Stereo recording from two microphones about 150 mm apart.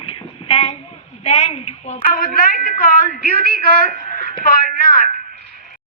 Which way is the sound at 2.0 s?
70° left (ahead or behind).